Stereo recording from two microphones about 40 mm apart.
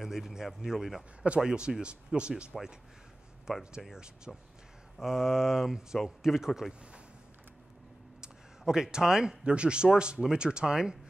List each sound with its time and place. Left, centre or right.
0.0 s speech: centre
1.4 s speech: centre
3.5 s speech: centre
5.0 s speech: centre
8.2 s a sound: centre
9.4 s speech: right